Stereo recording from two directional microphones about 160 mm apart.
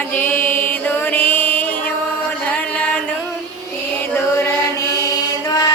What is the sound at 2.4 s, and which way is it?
Chant, 10° left (ahead or behind).